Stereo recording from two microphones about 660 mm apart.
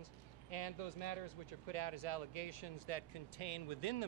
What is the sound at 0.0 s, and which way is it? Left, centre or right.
Speech, left.